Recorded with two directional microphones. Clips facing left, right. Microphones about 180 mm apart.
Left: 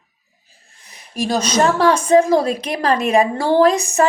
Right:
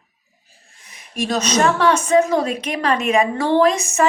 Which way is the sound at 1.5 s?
30° left (ahead or behind).